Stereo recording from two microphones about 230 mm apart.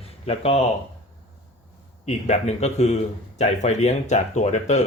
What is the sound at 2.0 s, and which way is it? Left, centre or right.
Speech, left.